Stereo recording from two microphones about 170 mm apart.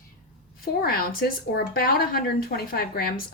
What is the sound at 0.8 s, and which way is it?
A woman's voice, 60° left (ahead or behind).